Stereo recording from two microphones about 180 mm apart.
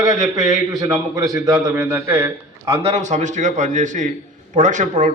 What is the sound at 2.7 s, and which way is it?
A man's voice, 40° right (ahead or behind).